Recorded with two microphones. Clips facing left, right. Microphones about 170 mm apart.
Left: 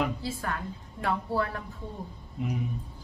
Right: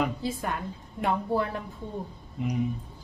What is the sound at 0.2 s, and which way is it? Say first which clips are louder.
Speech: right 2 dB; 20° right (ahead or behind).